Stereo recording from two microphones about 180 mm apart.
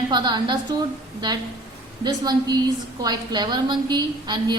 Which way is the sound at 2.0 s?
20° right (ahead or behind).